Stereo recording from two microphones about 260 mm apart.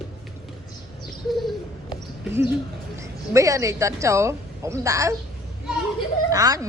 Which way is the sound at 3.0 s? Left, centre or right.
Centre.